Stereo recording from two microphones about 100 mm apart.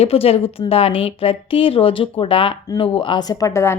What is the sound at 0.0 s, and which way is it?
A woman's voice, 80° left.